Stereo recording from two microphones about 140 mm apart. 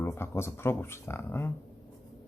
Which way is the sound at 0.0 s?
15° left (ahead or behind).